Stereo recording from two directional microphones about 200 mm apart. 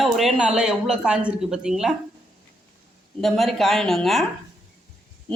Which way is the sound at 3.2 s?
Centre (ahead or behind).